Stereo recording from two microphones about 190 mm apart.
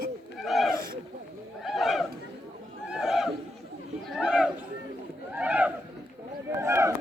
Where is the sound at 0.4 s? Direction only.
Centre (ahead or behind).